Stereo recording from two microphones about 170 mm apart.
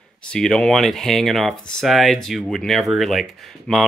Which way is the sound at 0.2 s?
5° left (ahead or behind).